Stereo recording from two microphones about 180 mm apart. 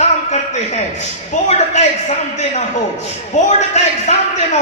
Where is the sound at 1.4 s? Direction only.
40° left (ahead or behind).